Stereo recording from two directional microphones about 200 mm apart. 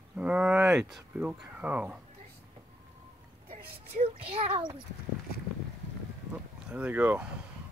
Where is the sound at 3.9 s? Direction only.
30° right (ahead or behind).